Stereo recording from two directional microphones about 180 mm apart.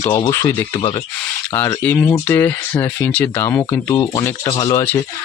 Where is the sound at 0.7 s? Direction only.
25° left (ahead or behind).